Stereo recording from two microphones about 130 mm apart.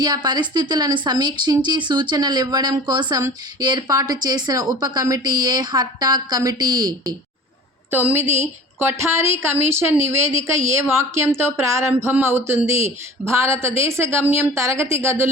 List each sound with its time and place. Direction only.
0.0 s a woman's voice: 35° right (ahead or behind)
7.9 s a woman's voice: 15° right (ahead or behind)